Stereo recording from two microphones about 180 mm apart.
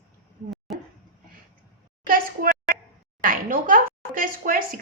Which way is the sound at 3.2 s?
50° right (ahead or behind).